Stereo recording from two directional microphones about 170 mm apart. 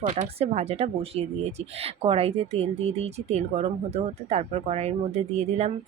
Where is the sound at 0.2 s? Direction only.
35° right (ahead or behind).